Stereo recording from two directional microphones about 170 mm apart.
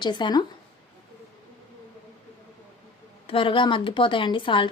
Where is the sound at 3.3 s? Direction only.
30° left (ahead or behind).